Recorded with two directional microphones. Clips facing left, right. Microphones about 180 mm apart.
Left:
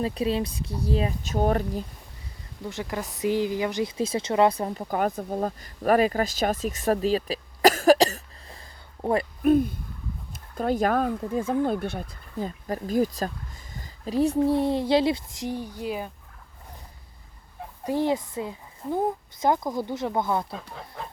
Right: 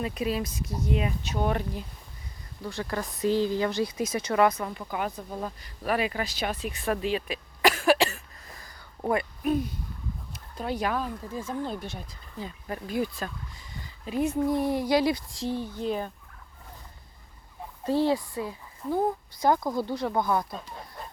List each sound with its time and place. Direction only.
0.0 s speech: 30° left (ahead or behind)
1.2 s speech: 45° left (ahead or behind)
2.6 s speech: 15° left (ahead or behind); by 8.6 s 35° left (ahead or behind)
9.4 s speech: 50° left (ahead or behind); by 16.1 s 10° left (ahead or behind)
17.8 s speech: 15° left (ahead or behind)
20.5 s speech: 90° left